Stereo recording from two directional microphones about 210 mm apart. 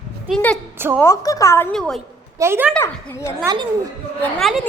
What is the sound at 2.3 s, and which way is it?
Speech, 10° right (ahead or behind).